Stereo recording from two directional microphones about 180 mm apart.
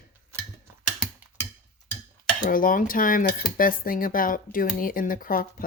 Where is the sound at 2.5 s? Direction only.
50° left (ahead or behind).